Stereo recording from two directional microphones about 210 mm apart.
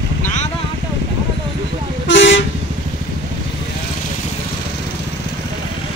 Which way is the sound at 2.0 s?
60° left (ahead or behind).